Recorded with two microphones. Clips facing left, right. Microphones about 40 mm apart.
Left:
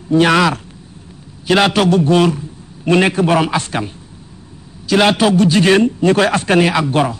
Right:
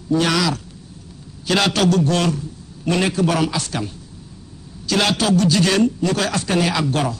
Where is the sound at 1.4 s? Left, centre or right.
Left.